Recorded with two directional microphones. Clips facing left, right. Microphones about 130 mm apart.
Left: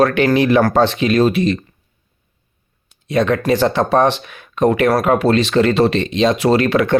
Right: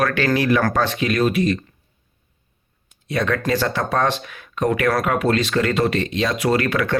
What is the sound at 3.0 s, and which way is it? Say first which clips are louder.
Speech: left 6 dB; 20° left (ahead or behind).